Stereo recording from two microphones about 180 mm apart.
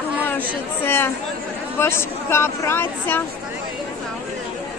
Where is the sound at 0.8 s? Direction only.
10° left (ahead or behind).